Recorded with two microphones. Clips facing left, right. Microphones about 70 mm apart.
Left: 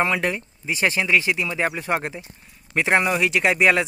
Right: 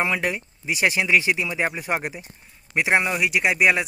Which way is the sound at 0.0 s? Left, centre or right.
Centre.